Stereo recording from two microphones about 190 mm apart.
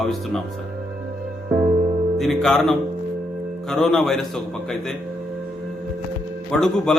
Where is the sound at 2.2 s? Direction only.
Centre (ahead or behind).